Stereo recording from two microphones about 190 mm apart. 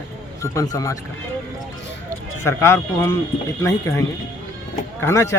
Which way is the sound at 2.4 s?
15° left (ahead or behind).